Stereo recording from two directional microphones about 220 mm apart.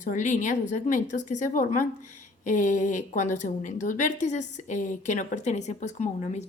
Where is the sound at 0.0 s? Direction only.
35° left (ahead or behind).